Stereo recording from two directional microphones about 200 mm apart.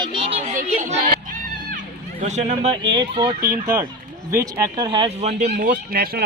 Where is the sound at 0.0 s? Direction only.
25° right (ahead or behind); by 1.8 s 45° right (ahead or behind).